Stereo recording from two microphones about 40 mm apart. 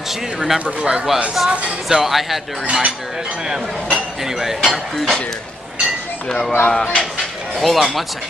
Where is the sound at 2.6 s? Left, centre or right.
Right.